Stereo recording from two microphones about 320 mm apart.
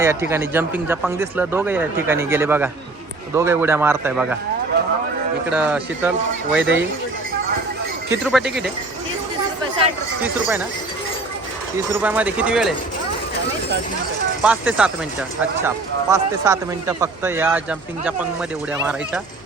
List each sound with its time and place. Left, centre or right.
0.0 s speech: centre
5.5 s speech: centre
6.6 s speech: right
8.1 s speech: centre
11.9 s speech: centre
14.4 s speech: centre